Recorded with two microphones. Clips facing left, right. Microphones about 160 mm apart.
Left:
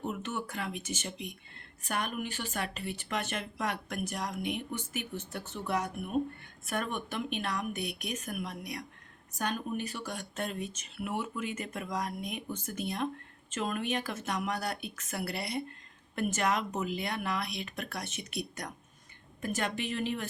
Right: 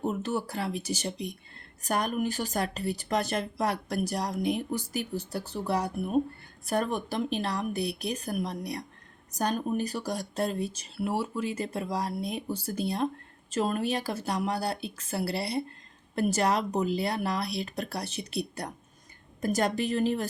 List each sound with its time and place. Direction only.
0.0 s speech: 35° right (ahead or behind)